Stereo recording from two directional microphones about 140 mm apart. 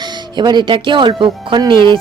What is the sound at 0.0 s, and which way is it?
Speech, 30° right (ahead or behind).